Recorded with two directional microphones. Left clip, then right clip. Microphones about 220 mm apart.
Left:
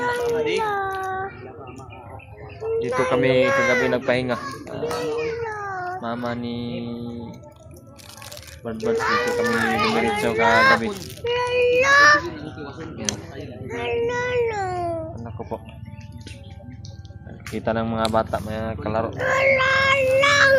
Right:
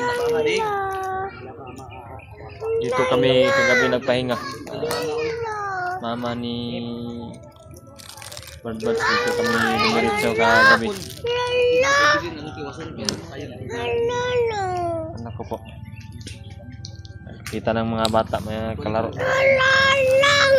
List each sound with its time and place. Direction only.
0.0 s cat: 5° right (ahead or behind)
0.5 s child singing: 5° right (ahead or behind)
2.7 s speech: 10° right (ahead or behind)
4.8 s music: 15° right (ahead or behind)
6.0 s speech: centre (ahead or behind)
8.6 s speech: centre (ahead or behind)
13.7 s child singing: 10° right (ahead or behind)
15.2 s music: centre (ahead or behind)
17.5 s speech: 5° right (ahead or behind)